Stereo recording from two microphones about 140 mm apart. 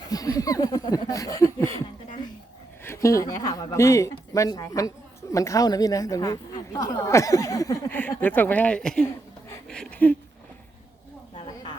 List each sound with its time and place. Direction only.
0.1 s a woman's voice: 25° left (ahead or behind)
2.8 s a woman's voice: 20° left (ahead or behind)
8.2 s a woman's voice: 10° left (ahead or behind)
9.6 s a sound: 5° left (ahead or behind)